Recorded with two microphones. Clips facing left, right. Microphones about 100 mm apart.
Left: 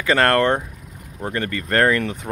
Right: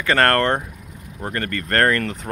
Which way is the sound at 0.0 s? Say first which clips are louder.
Left 1 dB; 10° left (ahead or behind).